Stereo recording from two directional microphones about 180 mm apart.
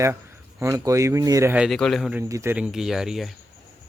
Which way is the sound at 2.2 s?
15° right (ahead or behind).